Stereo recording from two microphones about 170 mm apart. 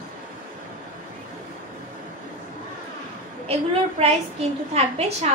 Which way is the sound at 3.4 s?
40° right (ahead or behind).